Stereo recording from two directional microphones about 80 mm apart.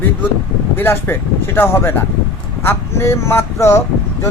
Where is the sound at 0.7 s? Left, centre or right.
Left.